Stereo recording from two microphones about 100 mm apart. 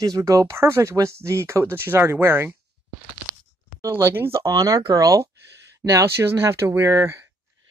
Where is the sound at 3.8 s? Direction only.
25° right (ahead or behind).